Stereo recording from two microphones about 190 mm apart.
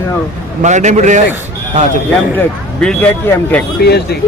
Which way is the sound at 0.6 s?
40° right (ahead or behind).